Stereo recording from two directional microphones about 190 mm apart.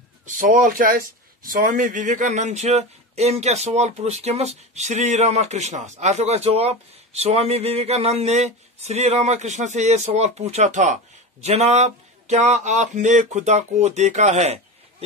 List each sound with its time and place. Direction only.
0.4 s speech: 45° right (ahead or behind)